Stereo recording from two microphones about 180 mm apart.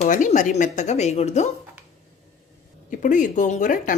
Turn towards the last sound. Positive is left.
turn(degrees=45)  # may be behind; listen again after turning